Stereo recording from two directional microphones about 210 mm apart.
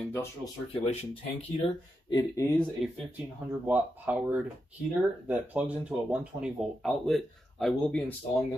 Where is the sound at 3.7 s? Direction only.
10° right (ahead or behind).